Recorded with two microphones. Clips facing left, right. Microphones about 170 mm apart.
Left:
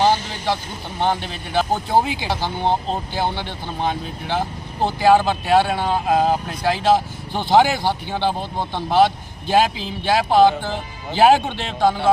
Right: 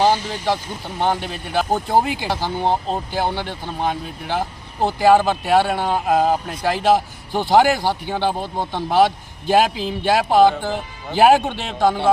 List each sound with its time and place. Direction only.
0.0 s speech: 10° right (ahead or behind)